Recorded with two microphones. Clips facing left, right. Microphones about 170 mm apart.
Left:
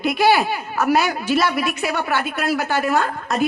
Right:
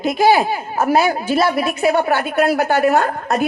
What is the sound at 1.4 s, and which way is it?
Speech, 30° right (ahead or behind).